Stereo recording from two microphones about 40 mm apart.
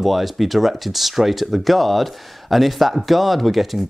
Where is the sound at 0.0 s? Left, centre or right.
Centre.